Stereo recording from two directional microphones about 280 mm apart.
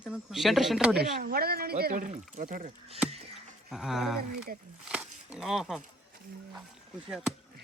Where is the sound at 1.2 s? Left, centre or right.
Right.